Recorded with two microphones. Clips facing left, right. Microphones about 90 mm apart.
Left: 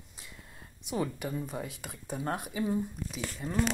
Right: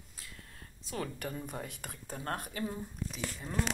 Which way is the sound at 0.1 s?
20° left (ahead or behind).